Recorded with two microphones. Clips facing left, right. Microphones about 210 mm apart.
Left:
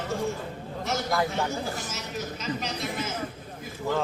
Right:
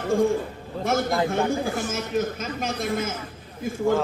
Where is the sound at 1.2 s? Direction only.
50° right (ahead or behind).